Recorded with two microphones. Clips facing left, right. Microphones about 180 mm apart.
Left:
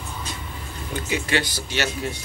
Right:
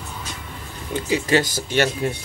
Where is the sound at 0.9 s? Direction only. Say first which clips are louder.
Right 5 dB; 35° right (ahead or behind).